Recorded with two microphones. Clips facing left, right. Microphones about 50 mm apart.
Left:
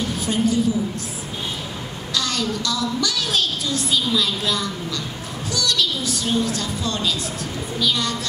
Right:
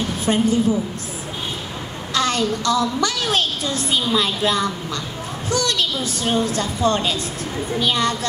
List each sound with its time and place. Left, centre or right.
0.2 s a woman's voice: right
2.1 s a woman's voice: right